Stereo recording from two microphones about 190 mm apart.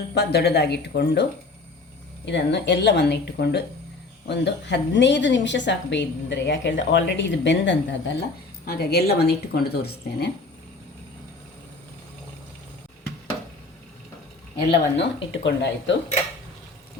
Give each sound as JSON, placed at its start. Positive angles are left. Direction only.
{"t": 0.1, "sound": "a woman's voice", "side_deg": 60}
{"t": 8.7, "sound": "speech", "side_deg": 60}
{"t": 14.7, "sound": "a woman's voice", "side_deg": 70}